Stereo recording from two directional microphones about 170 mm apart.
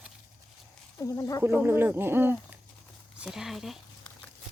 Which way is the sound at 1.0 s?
20° left (ahead or behind).